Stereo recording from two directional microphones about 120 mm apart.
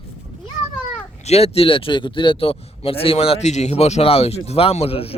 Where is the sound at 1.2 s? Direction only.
60° left (ahead or behind).